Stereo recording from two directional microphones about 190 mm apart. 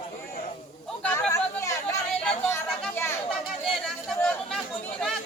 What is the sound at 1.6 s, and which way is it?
Chatter, 15° left (ahead or behind).